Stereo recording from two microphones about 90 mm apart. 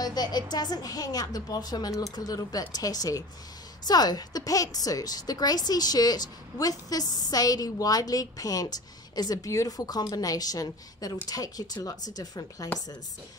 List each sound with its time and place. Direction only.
0.0 s a woman's voice: 50° left (ahead or behind)